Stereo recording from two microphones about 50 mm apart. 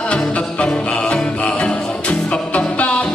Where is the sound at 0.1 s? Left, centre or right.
Left.